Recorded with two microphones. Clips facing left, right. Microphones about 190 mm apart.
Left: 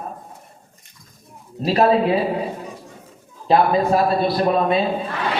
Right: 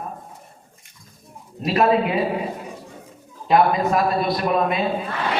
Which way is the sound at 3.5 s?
30° left (ahead or behind).